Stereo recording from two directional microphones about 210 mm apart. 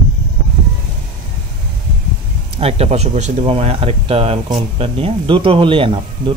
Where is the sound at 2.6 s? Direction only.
30° right (ahead or behind).